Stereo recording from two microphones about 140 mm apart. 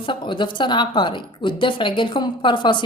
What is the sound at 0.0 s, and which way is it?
Speech, 35° left (ahead or behind).